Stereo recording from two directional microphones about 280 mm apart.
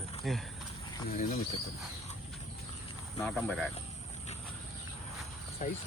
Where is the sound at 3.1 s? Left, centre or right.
Centre.